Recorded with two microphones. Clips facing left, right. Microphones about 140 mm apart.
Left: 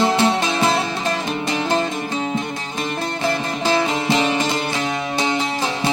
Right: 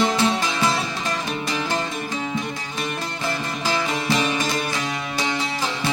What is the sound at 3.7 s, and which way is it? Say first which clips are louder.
Music: left 5 dB; 25° left (ahead or behind).